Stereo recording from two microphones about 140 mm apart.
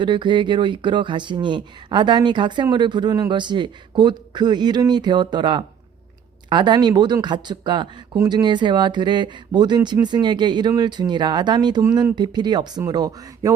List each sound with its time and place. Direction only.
0.0 s speech: 35° right (ahead or behind)